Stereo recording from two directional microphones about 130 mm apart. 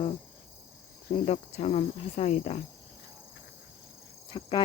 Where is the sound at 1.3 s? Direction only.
55° left (ahead or behind).